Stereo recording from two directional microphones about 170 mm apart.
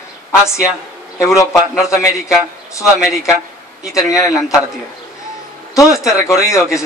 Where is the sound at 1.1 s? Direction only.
20° left (ahead or behind).